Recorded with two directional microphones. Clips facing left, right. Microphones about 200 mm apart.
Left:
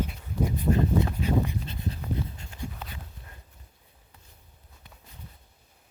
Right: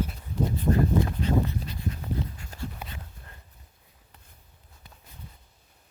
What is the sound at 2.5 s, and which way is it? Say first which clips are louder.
Dog: right 1 dB; 40° right (ahead or behind).